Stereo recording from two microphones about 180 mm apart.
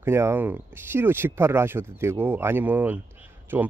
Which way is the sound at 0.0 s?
15° right (ahead or behind).